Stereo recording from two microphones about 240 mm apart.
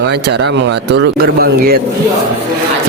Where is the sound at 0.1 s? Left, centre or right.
Right.